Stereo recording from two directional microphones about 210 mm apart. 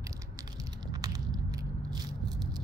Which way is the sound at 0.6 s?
20° right (ahead or behind).